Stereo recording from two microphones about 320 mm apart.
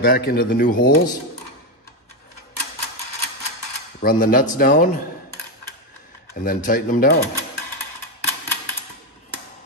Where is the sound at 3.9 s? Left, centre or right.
Left.